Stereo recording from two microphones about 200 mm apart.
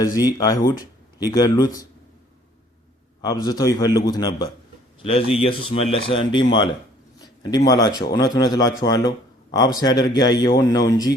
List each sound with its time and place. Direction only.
0.2 s speech: 20° left (ahead or behind)
3.2 s speech: 20° left (ahead or behind)
7.5 s speech: 20° left (ahead or behind)